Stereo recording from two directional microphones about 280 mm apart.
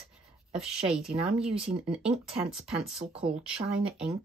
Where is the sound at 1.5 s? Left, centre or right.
Right.